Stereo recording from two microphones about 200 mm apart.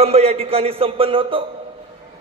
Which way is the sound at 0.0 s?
30° right (ahead or behind).